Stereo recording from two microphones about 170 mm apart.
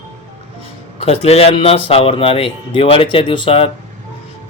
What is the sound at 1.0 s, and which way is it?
Speech, 35° left (ahead or behind).